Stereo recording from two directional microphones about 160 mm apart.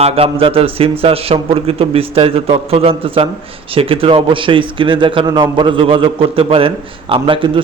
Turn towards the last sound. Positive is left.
turn(degrees=-30)  # may be behind; listen again after turning